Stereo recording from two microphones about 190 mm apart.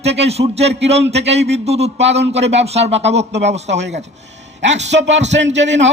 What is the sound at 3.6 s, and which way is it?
Speech, 70° right (ahead or behind).